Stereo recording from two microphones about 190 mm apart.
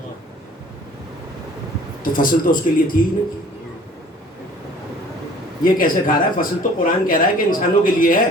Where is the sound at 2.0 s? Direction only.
45° left (ahead or behind).